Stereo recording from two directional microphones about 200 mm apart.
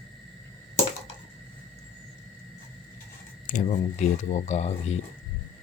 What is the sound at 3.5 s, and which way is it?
Speech, 40° left (ahead or behind).